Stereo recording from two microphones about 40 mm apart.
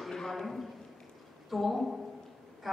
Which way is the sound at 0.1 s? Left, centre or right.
Centre.